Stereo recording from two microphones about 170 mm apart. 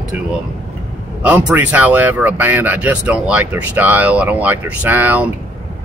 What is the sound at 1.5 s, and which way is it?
Speech, 10° right (ahead or behind).